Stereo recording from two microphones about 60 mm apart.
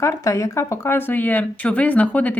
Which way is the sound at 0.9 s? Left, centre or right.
Left.